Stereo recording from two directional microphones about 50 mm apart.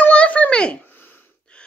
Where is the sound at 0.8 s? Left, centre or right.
Left.